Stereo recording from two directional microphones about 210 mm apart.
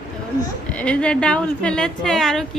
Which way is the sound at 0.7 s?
5° left (ahead or behind).